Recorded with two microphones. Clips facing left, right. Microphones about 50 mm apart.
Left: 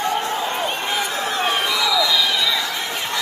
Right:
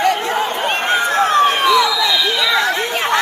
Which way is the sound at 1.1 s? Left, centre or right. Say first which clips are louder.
Right 11 dB; right.